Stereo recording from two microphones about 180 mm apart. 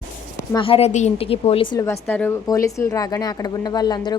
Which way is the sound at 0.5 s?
30° left (ahead or behind).